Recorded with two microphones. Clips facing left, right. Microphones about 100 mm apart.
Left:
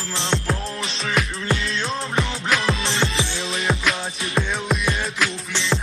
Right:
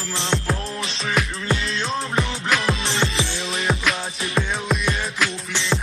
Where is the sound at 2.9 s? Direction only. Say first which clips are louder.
Even; 20° left (ahead or behind).